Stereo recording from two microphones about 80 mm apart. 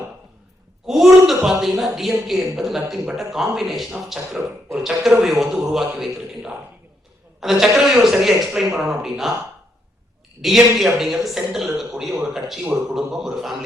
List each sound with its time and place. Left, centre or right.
0.9 s speech: centre
10.4 s speech: centre